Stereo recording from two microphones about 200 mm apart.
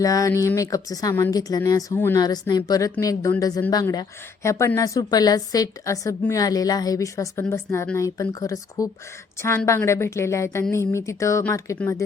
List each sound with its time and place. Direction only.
0.0 s a woman's voice: 15° left (ahead or behind)